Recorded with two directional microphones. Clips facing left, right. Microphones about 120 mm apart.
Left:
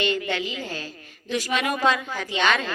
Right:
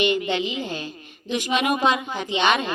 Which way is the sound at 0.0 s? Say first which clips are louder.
Right 3 dB; 20° right (ahead or behind).